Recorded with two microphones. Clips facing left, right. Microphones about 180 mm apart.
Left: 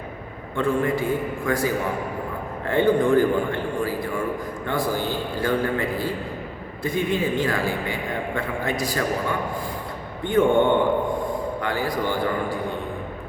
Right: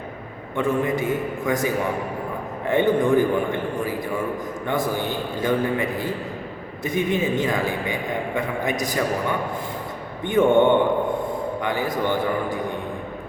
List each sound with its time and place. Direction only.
0.5 s a man's voice: 20° right (ahead or behind)
10.2 s a man's voice: 20° right (ahead or behind)